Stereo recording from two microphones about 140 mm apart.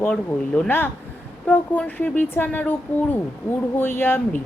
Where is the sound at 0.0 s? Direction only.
5° left (ahead or behind).